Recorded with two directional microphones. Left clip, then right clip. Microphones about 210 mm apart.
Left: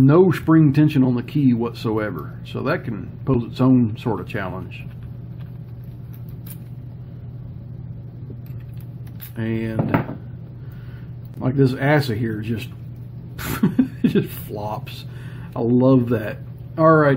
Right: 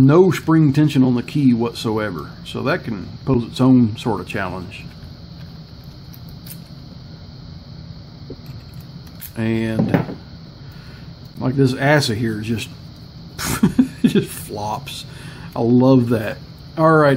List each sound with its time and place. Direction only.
0.0 s speech: 5° right (ahead or behind)
9.4 s speech: 10° right (ahead or behind)
11.3 s speech: 5° right (ahead or behind)